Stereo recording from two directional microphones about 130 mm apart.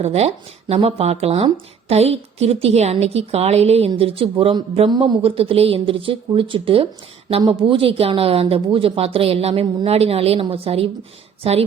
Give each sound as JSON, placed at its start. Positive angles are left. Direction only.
{"t": 0.0, "sound": "speech", "side_deg": -55}
{"t": 4.9, "sound": "speech", "side_deg": -35}